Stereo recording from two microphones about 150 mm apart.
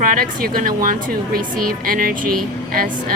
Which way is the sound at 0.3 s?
65° right (ahead or behind).